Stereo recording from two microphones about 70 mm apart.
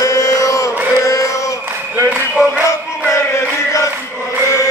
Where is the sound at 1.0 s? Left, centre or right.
Left.